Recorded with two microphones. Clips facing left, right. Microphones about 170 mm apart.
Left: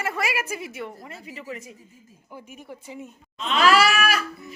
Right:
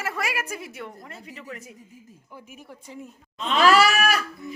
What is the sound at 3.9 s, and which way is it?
Goat, 45° right (ahead or behind).